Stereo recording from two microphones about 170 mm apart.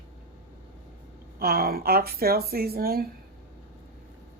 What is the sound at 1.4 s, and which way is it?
Speech, 65° right (ahead or behind).